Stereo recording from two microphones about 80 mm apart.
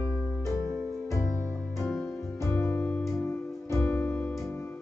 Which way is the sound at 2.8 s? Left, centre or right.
Centre.